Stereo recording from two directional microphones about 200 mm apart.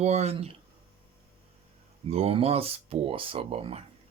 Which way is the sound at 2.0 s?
30° right (ahead or behind).